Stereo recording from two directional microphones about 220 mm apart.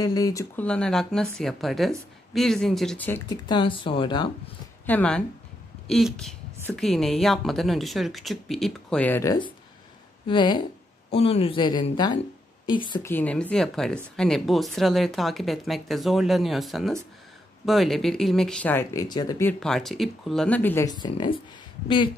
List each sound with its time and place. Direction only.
0.0 s speech: 15° left (ahead or behind)
3.3 s speech: 20° left (ahead or behind)
4.8 s speech: 5° left (ahead or behind)
13.1 s speech: 5° left (ahead or behind); by 22.1 s 20° left (ahead or behind)